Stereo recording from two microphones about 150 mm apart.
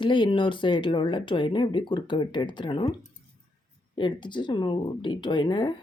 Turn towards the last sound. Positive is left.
turn(degrees=30)  # may be behind; listen again after turning